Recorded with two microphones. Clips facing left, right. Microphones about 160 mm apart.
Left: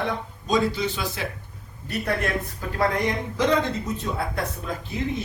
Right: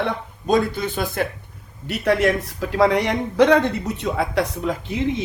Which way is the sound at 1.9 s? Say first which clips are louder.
Right 8 dB; 80° right.